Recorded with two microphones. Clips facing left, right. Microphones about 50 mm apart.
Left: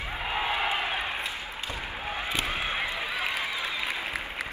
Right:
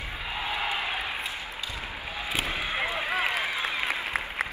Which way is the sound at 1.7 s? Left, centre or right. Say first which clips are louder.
Left 2 dB; left.